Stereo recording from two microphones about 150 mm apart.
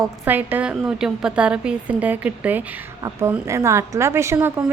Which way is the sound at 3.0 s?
20° right (ahead or behind).